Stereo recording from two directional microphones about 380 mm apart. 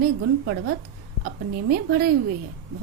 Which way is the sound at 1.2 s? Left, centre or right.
Right.